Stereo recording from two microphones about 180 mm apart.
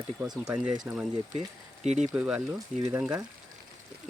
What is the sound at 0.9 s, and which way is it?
Speech, 5° right (ahead or behind).